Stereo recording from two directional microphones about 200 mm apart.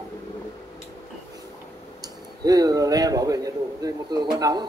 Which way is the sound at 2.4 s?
20° right (ahead or behind).